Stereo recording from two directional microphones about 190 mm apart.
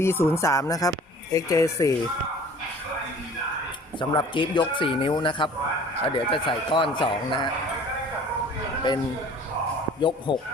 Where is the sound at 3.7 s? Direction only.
25° left (ahead or behind).